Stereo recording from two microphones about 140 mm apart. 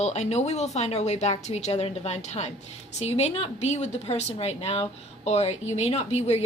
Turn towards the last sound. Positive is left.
turn(degrees=50)  # may be behind; listen again after turning